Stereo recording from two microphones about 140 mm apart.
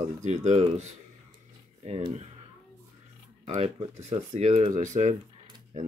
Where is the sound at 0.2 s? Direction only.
55° right (ahead or behind).